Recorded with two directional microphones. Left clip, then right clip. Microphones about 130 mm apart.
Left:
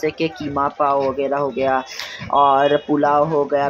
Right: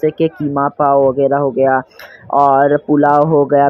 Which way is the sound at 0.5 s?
30° right (ahead or behind).